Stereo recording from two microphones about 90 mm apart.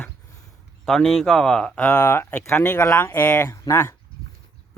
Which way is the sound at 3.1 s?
20° left (ahead or behind).